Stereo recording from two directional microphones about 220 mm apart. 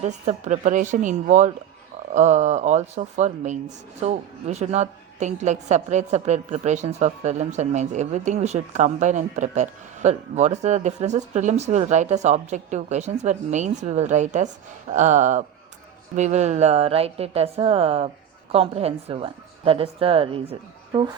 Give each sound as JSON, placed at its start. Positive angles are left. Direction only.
{"t": 0.0, "sound": "a woman's voice", "side_deg": -30}